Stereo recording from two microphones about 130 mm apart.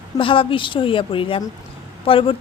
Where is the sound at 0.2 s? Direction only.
40° left (ahead or behind).